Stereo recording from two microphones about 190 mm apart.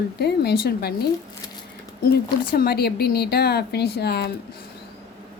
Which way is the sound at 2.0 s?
55° left (ahead or behind).